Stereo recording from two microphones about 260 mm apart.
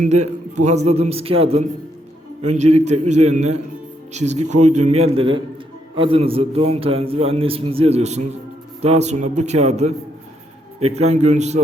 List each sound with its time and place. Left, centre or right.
0.0 s a man's voice: right